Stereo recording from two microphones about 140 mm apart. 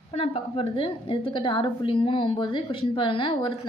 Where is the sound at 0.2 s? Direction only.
40° left (ahead or behind).